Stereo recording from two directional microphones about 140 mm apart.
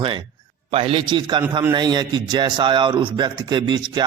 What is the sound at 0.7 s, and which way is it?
A man's voice, 40° right (ahead or behind).